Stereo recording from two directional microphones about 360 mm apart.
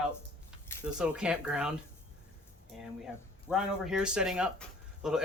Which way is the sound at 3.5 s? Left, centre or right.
Centre.